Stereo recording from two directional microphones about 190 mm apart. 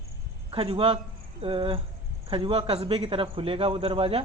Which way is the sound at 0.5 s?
30° right (ahead or behind).